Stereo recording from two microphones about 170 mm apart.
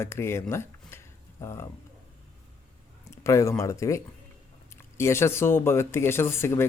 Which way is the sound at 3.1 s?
15° left (ahead or behind).